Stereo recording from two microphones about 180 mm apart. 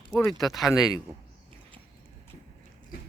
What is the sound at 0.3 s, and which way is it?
Speech, centre (ahead or behind).